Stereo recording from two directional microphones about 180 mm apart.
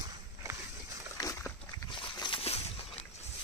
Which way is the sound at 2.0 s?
30° left (ahead or behind).